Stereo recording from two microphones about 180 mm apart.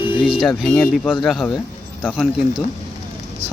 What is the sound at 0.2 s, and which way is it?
Speech, centre (ahead or behind).